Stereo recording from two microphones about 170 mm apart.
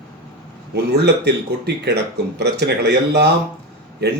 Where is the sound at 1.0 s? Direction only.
80° right.